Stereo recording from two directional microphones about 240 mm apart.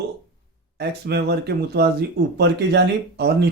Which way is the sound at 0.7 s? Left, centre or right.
Right.